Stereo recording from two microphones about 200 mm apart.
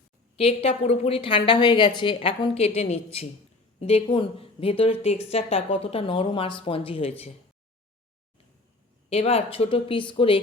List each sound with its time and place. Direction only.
0.3 s a woman's voice: 30° left (ahead or behind)
9.0 s a woman's voice: 30° left (ahead or behind)